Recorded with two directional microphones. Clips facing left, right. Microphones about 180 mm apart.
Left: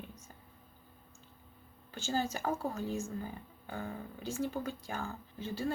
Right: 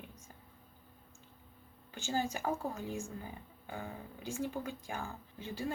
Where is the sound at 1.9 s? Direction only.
15° right (ahead or behind).